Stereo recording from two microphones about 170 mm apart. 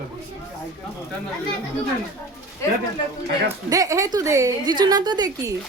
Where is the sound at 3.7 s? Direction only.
20° right (ahead or behind).